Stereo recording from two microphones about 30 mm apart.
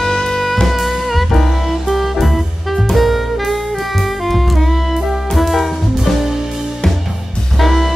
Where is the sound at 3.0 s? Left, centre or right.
Centre.